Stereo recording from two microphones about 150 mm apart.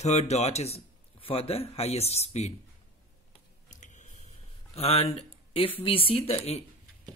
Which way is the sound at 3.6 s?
55° left (ahead or behind).